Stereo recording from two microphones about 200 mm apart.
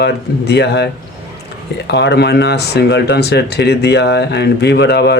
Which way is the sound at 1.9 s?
55° left (ahead or behind).